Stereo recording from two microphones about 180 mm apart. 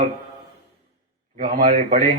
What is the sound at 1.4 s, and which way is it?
Speech, 40° right (ahead or behind).